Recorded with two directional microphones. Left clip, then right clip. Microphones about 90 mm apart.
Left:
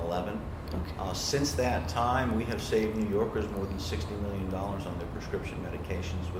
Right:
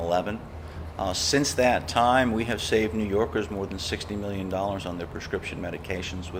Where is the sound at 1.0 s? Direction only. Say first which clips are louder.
Right 7 dB; 40° right (ahead or behind).